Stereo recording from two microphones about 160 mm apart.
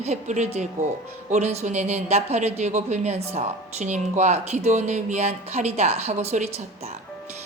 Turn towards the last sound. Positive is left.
turn(degrees=-40)  # may be behind; listen again after turning